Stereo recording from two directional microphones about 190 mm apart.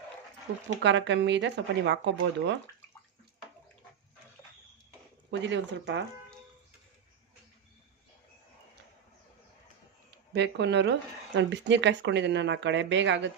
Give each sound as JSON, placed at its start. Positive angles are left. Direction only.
{"t": 0.8, "sound": "speech", "side_deg": -70}
{"t": 5.3, "sound": "speech", "side_deg": -70}
{"t": 10.3, "sound": "speech", "side_deg": -65}